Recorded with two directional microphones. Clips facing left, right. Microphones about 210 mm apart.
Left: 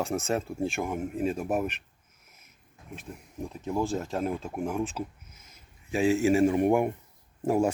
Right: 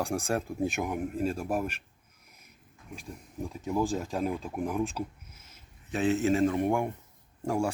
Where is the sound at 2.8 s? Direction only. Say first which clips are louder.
Left 1 dB; centre (ahead or behind).